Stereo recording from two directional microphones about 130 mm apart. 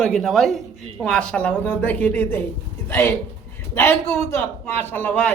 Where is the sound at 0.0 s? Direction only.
5° left (ahead or behind).